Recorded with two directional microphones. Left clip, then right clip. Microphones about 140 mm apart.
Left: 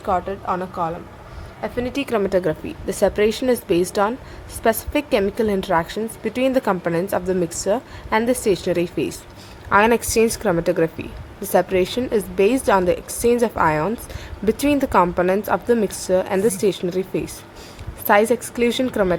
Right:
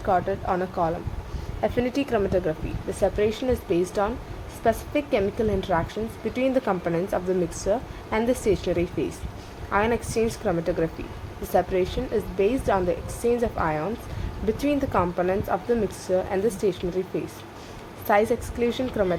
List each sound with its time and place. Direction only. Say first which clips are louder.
0.0 s speech: left 2 dB; 5° left (ahead or behind)
0.5 s speech: left 2 dB; 5° right (ahead or behind)
2.0 s a woman's voice: left 4 dB; 40° left (ahead or behind)
9.6 s speech: left 8 dB; 50° left (ahead or behind)